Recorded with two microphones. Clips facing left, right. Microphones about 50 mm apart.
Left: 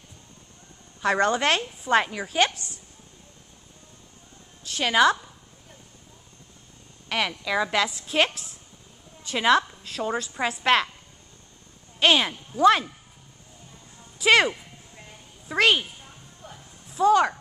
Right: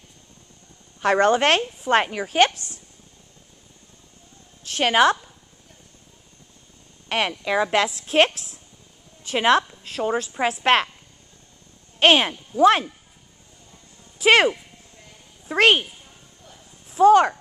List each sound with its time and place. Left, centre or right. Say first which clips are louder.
1.0 s a woman's voice: right 4 dB; right
4.6 s a woman's voice: right 2 dB; right
7.1 s a woman's voice: right 3 dB; right
12.0 s a woman's voice: right 4 dB; right
14.1 s speech: right 3 dB; right
15.5 s a woman's voice: right 4 dB; right
16.4 s a sound: left 5 dB; left
16.9 s a sound: right 5 dB; right